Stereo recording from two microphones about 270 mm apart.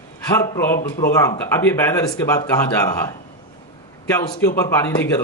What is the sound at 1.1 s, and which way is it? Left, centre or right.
Speech, centre.